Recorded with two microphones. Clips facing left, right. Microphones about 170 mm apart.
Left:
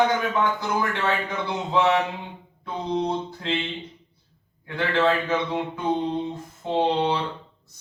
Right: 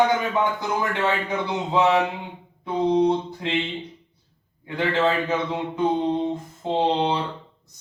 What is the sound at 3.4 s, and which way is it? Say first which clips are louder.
Speech: even; 20° right (ahead or behind).